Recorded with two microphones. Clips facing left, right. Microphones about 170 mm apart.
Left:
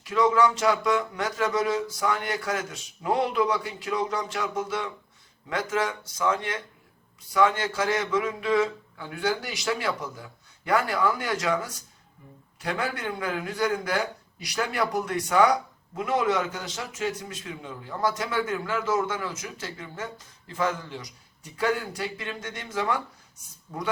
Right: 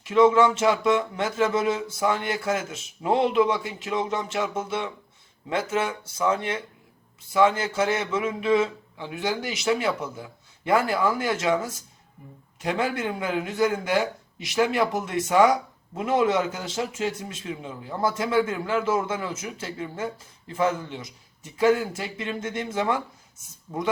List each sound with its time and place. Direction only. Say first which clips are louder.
0.0 s a man's voice: right 4 dB; 25° right (ahead or behind)
12.6 s a man's voice: right 4 dB; 25° right (ahead or behind)